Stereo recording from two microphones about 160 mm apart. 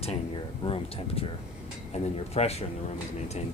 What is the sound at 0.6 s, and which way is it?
Speech, 35° left (ahead or behind).